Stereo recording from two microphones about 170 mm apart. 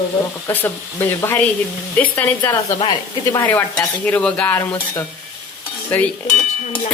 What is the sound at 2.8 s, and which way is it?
Speech, 25° left (ahead or behind).